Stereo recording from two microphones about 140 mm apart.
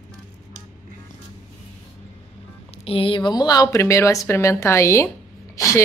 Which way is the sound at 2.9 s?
40° left (ahead or behind).